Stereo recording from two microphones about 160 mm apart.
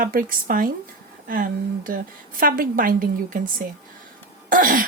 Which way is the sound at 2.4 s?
60° right (ahead or behind).